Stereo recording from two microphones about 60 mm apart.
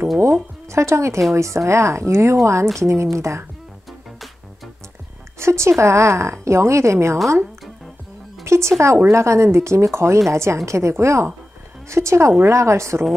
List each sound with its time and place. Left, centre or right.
0.7 s a woman's voice: right
5.4 s a woman's voice: right
8.5 s a woman's voice: right